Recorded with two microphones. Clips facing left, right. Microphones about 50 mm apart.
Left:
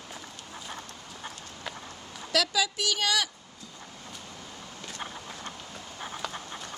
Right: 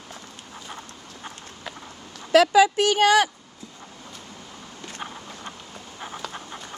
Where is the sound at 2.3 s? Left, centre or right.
Right.